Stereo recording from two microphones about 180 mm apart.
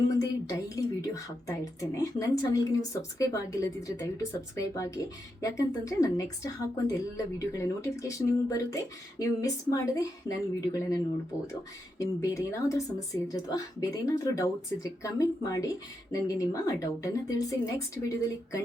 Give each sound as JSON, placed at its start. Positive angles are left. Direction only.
{"t": 0.2, "sound": "a woman's voice", "side_deg": 20}